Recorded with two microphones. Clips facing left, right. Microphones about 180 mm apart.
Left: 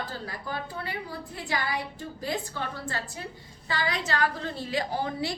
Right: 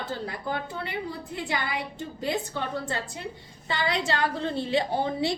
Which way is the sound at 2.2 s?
25° right (ahead or behind).